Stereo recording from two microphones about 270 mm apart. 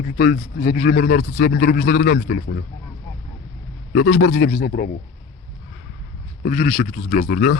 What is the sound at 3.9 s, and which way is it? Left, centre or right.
A man's voice, left.